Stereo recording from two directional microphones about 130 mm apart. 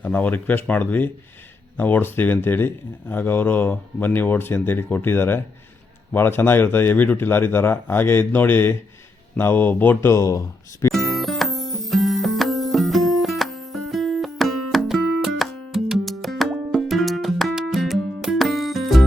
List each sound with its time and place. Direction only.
0.0 s speech: 15° left (ahead or behind)
10.9 s music: centre (ahead or behind)